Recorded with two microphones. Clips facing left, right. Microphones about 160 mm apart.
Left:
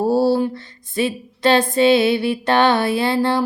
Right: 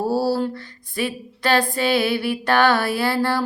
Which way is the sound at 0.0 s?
25° left (ahead or behind).